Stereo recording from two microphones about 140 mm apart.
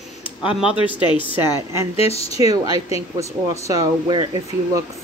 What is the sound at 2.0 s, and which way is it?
Speech, 45° left (ahead or behind).